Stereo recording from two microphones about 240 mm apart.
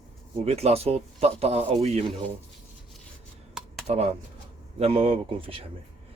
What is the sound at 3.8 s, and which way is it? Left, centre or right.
Speech, right.